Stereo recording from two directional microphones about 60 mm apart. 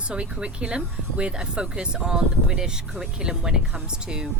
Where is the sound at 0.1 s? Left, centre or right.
Centre.